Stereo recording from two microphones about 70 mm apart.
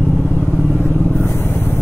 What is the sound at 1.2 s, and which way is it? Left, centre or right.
Vehicle, left.